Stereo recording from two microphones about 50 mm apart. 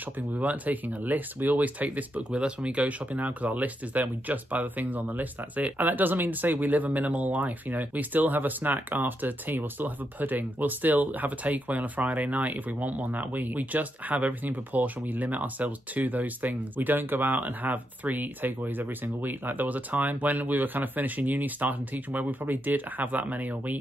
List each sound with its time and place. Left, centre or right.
0.4 s speech: right